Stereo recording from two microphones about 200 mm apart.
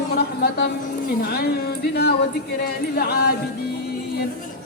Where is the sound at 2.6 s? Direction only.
50° left (ahead or behind).